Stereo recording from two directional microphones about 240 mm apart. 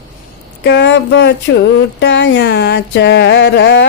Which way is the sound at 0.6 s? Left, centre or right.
Left.